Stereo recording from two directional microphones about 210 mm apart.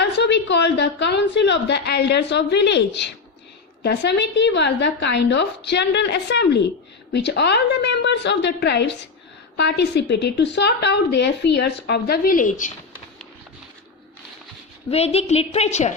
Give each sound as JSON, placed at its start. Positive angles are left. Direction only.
{"t": 0.0, "sound": "a woman's voice", "side_deg": 55}
{"t": 14.8, "sound": "a woman's voice", "side_deg": 30}